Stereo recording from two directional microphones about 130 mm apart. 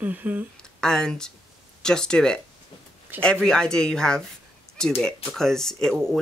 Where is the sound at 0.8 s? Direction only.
5° left (ahead or behind).